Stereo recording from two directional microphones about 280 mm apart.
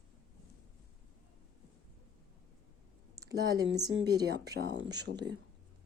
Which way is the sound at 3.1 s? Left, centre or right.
Centre.